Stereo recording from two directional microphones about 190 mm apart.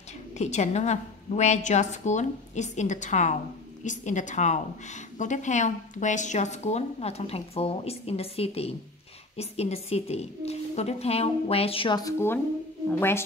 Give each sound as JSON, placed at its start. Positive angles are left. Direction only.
{"t": 0.4, "sound": "a woman's voice", "side_deg": 35}